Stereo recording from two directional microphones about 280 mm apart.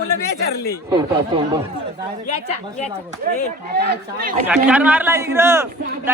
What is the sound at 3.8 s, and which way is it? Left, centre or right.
Speech, right.